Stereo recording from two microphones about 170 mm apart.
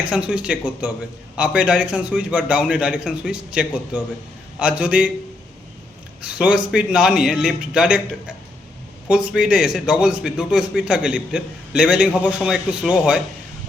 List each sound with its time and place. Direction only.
0.1 s a man's voice: 5° right (ahead or behind)
6.2 s a man's voice: 5° right (ahead or behind)
9.0 s a man's voice: 5° right (ahead or behind)